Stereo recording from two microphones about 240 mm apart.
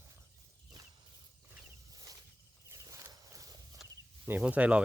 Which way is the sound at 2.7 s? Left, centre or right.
Centre.